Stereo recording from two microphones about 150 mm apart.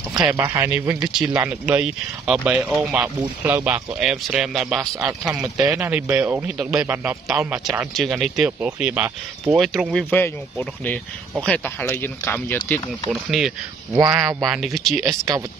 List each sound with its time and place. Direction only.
0.2 s speech: 15° right (ahead or behind)
5.6 s speech: 15° right (ahead or behind)
7.9 s speech: centre (ahead or behind)
10.1 s speech: 10° left (ahead or behind)
13.1 s speech: centre (ahead or behind)
13.9 s speech: 25° right (ahead or behind)
14.4 s speech: centre (ahead or behind)
15.0 s speech: 20° right (ahead or behind)